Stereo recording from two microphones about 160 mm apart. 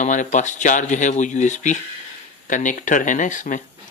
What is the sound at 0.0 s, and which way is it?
Speech, 50° left (ahead or behind).